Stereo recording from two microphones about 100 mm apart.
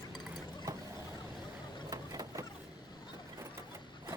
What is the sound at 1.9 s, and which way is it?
Vehicle, 35° right (ahead or behind).